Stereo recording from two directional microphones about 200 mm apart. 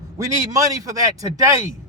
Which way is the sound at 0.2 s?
15° right (ahead or behind).